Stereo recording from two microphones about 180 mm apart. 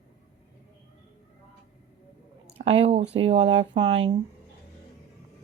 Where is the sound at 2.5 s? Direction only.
35° right (ahead or behind).